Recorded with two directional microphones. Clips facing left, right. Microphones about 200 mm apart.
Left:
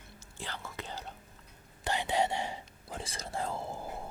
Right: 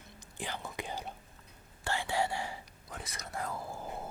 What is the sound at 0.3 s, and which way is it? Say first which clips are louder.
Whispering: right 2 dB; 15° right (ahead or behind).